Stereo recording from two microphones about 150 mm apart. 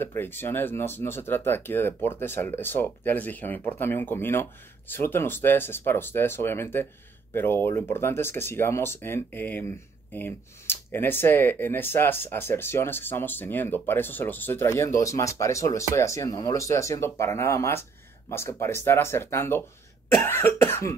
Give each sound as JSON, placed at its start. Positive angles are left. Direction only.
{"t": 0.0, "sound": "speech", "side_deg": 15}